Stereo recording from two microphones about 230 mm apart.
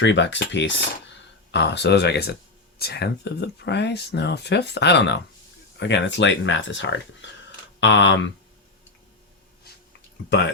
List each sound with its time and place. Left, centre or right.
0.0 s speech: left
10.2 s speech: left